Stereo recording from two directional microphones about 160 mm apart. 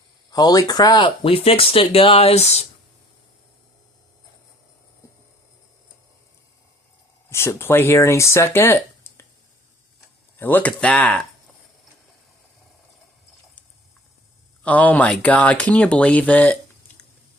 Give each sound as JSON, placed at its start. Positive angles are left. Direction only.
{"t": 0.3, "sound": "speech", "side_deg": 25}
{"t": 7.3, "sound": "speech", "side_deg": 15}
{"t": 10.3, "sound": "speech", "side_deg": 10}
{"t": 14.6, "sound": "speech", "side_deg": 10}